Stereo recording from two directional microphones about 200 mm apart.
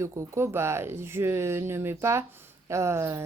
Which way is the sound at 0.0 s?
15° right (ahead or behind).